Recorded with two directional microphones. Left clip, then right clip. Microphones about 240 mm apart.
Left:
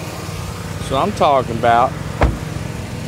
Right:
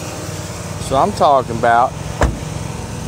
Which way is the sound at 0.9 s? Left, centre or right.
Centre.